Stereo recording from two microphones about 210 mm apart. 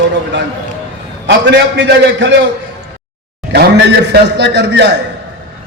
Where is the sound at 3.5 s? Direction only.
50° right (ahead or behind).